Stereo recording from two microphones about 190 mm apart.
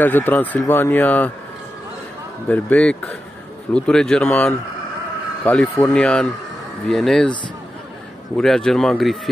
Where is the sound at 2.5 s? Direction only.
5° left (ahead or behind).